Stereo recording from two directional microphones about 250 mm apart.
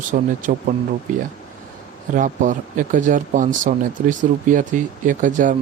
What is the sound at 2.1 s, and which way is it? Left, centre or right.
Speech, right.